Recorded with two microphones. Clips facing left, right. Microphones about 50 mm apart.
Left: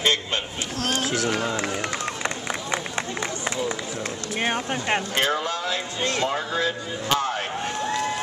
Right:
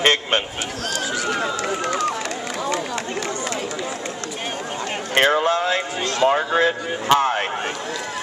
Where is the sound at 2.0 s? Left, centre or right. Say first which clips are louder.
Right 4 dB; left.